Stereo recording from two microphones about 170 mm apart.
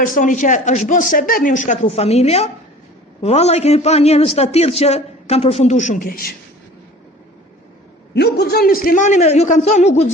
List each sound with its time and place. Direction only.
0.0 s a man's voice: 50° left (ahead or behind)
8.1 s speech: 75° left (ahead or behind); by 10.1 s 40° left (ahead or behind)